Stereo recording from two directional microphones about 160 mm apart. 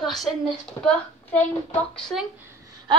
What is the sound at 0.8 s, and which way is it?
Speech, 20° left (ahead or behind).